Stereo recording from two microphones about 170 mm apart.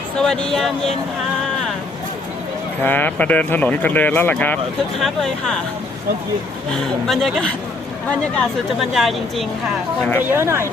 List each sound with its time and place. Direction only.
0.2 s speech: 5° left (ahead or behind)
2.8 s speech: 10° left (ahead or behind)
6.7 s speech: centre (ahead or behind)
10.0 s speech: 15° left (ahead or behind)
10.2 s speech: 15° right (ahead or behind)